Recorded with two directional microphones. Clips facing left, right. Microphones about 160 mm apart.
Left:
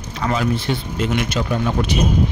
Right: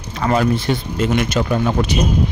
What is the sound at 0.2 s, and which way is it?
Speech, 50° right (ahead or behind).